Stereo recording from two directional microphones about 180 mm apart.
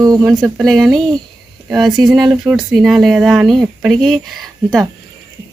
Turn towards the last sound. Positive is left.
turn(degrees=0)  # may be behind; listen again after turning